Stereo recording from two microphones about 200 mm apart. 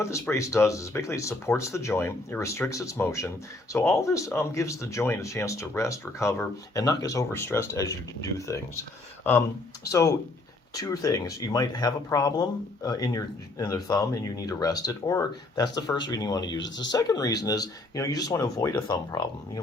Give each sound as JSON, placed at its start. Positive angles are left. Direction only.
{"t": 0.0, "sound": "speech", "side_deg": 15}
{"t": 9.8, "sound": "speech", "side_deg": 15}
{"t": 16.6, "sound": "speech", "side_deg": 65}
{"t": 16.9, "sound": "speech", "side_deg": 15}